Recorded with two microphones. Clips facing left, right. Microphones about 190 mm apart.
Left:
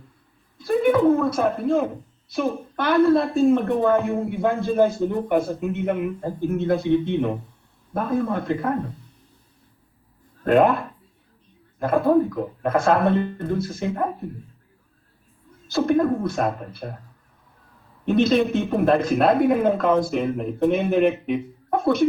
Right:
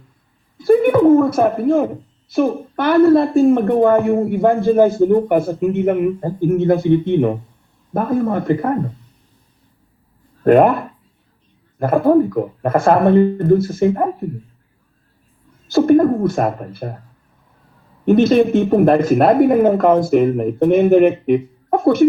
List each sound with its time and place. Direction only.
0.6 s a sound: 55° right (ahead or behind)
2.3 s a woman's voice: 55° right (ahead or behind)
10.4 s a woman's voice: 55° right (ahead or behind)
15.6 s a woman's voice: 50° right (ahead or behind)
18.0 s a woman's voice: 50° right (ahead or behind)